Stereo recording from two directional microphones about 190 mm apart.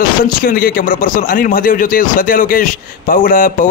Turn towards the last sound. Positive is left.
turn(degrees=45)  # may be behind; listen again after turning